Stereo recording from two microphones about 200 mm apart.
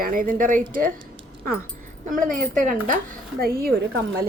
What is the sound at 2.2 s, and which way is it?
A woman's voice, 40° right (ahead or behind).